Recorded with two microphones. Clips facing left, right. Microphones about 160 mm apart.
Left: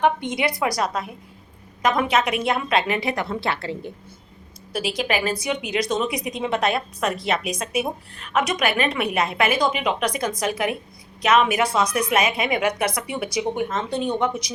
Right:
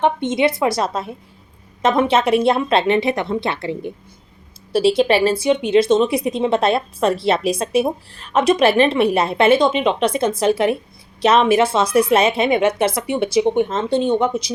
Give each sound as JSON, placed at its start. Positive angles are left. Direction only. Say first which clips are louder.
{"t": 0.0, "sound": "a woman's voice", "louder": "right 4 dB", "side_deg": -25}
{"t": 4.7, "sound": "a woman's voice", "louder": "right 10 dB", "side_deg": -30}